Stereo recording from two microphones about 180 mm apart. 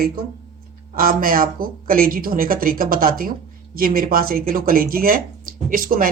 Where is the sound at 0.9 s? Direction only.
50° right (ahead or behind).